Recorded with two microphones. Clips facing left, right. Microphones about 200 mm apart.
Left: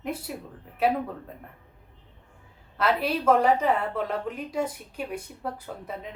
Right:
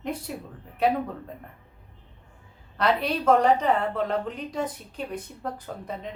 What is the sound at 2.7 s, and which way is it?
A woman's voice, 5° left (ahead or behind).